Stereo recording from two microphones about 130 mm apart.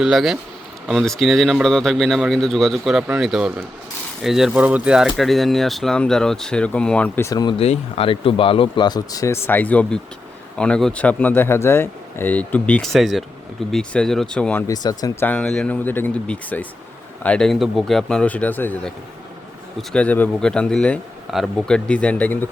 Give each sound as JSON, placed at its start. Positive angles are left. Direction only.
{"t": 0.0, "sound": "speech", "side_deg": 0}
{"t": 7.2, "sound": "speech", "side_deg": 25}
{"t": 7.6, "sound": "speech", "side_deg": 50}
{"t": 14.7, "sound": "speech", "side_deg": 30}
{"t": 15.2, "sound": "speech", "side_deg": 10}